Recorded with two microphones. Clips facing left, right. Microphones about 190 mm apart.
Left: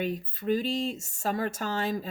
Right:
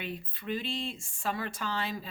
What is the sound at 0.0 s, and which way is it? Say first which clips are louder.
Speech: left 8 dB; 40° left (ahead or behind).